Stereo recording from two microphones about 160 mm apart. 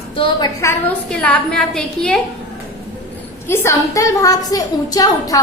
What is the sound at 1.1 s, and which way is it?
A woman's voice, 5° left (ahead or behind).